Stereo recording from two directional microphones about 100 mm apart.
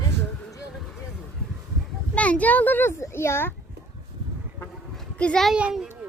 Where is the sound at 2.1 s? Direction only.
15° left (ahead or behind).